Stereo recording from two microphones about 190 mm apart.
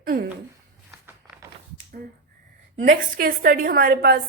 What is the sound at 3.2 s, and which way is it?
A woman's voice, 55° right (ahead or behind).